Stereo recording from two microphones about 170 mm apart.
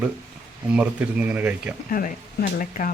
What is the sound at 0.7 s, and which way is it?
Speech, 10° right (ahead or behind).